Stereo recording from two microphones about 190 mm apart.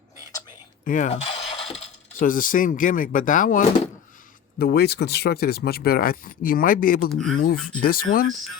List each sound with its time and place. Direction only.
0.9 s mechanisms: 40° left (ahead or behind)
2.1 s speech: 45° left (ahead or behind)
4.5 s speech: 55° left (ahead or behind)
7.1 s speech: centre (ahead or behind)
7.3 s speech: 50° left (ahead or behind)